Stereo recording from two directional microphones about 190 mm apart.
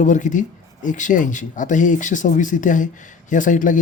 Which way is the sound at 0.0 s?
40° left (ahead or behind).